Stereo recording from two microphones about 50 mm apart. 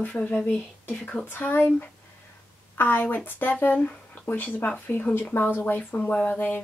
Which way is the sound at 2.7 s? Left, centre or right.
Left.